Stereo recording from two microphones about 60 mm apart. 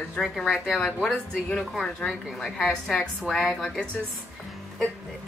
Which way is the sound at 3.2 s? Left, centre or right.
Centre.